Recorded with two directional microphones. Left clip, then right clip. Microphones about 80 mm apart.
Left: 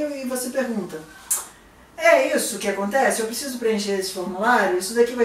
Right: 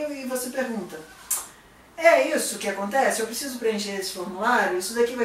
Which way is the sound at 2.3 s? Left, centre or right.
Centre.